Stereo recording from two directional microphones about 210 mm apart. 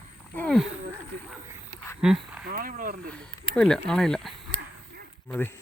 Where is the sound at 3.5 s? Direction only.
5° left (ahead or behind).